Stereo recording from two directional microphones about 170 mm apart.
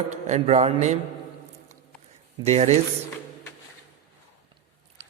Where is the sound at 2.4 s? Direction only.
40° right (ahead or behind).